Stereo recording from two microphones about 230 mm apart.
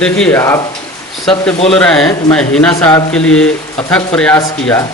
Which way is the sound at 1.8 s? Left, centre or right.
Centre.